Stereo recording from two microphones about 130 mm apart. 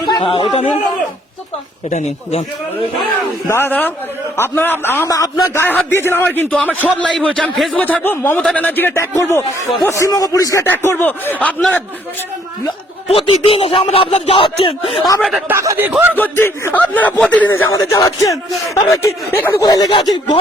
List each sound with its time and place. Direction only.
0.2 s speech: 45° left (ahead or behind)
1.9 s a man's voice: 70° left (ahead or behind)
3.4 s a man's voice: 20° left (ahead or behind)
5.0 s speech: 25° left (ahead or behind)
5.6 s a man's voice: 15° left (ahead or behind)
13.1 s speech: 45° left (ahead or behind)
13.8 s speech: 55° left (ahead or behind)
15.2 s speech: 10° right (ahead or behind)
15.5 s speech: 20° right (ahead or behind)
16.1 s a man's voice: 15° left (ahead or behind)
19.6 s speech: 30° left (ahead or behind)